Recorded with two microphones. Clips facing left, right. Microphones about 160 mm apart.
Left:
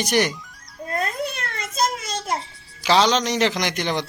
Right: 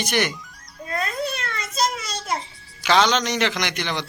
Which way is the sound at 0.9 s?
50° left (ahead or behind).